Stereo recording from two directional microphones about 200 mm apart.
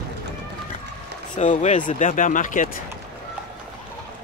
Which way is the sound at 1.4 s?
35° left (ahead or behind).